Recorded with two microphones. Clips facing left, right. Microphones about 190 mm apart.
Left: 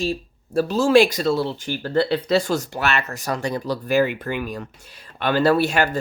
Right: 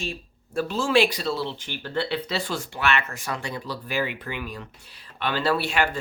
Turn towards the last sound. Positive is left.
turn(degrees=40)  # may be behind; listen again after turning